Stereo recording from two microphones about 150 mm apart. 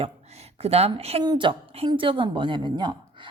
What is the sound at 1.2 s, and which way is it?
Speech, 30° right (ahead or behind).